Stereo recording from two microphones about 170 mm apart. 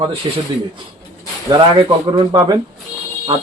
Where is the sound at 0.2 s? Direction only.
25° right (ahead or behind).